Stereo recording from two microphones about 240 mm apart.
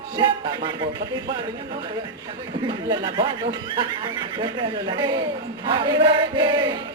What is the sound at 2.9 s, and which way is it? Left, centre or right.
Speech, centre.